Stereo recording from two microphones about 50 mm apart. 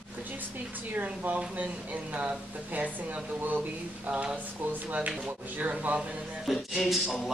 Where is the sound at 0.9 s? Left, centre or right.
Right.